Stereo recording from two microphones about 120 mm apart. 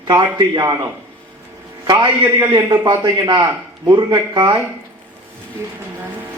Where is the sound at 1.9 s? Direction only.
35° right (ahead or behind).